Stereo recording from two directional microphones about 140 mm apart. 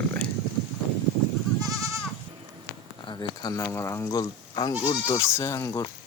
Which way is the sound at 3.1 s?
30° left (ahead or behind).